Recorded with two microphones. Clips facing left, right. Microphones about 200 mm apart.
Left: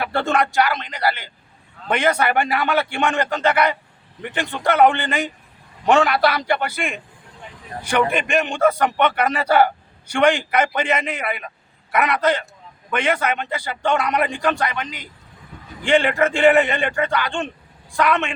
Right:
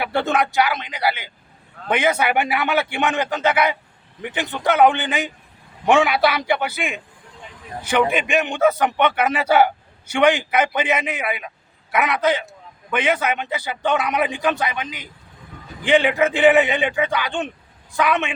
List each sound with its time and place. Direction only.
0.0 s a man's voice: 5° right (ahead or behind)
8.1 s a man's voice: 5° right (ahead or behind)
15.9 s a man's voice: 5° right (ahead or behind)